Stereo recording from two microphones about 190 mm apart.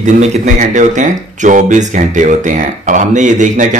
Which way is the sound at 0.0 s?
35° right (ahead or behind).